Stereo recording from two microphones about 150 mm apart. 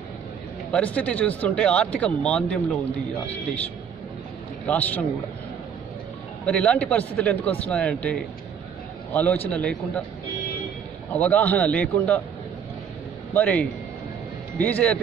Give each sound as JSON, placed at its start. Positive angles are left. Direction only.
{"t": 0.7, "sound": "speech", "side_deg": 10}
{"t": 4.6, "sound": "speech", "side_deg": 10}
{"t": 6.4, "sound": "speech", "side_deg": 10}
{"t": 9.1, "sound": "speech", "side_deg": 10}
{"t": 11.1, "sound": "speech", "side_deg": 10}
{"t": 13.3, "sound": "speech", "side_deg": 10}